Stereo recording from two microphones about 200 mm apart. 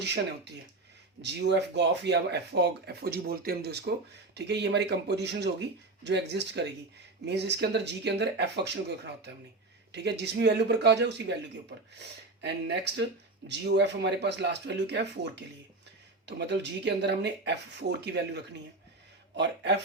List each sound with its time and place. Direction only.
1.2 s speech: 60° right (ahead or behind)
9.9 s speech: 55° right (ahead or behind)